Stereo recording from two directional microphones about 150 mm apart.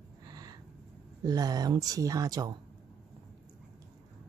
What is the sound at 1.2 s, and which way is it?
Speech, 25° right (ahead or behind).